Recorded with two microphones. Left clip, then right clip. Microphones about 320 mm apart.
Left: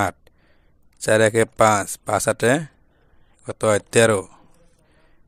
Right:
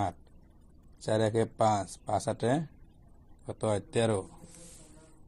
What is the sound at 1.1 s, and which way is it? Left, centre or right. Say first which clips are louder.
Speech: left 12 dB; left.